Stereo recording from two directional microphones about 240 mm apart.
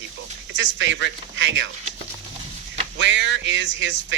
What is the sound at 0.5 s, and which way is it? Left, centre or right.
Speech, right.